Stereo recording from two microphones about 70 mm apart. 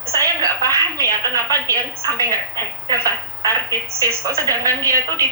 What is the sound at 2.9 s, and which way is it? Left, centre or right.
A woman's voice, right.